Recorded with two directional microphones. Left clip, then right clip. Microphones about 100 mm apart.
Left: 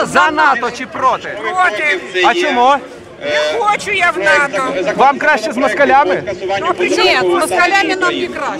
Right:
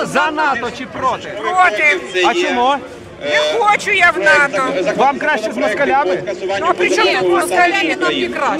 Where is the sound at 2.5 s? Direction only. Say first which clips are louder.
Left 4 dB; 35° left (ahead or behind).